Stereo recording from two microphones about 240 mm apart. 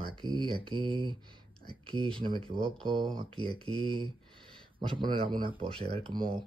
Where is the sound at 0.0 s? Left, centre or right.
Centre.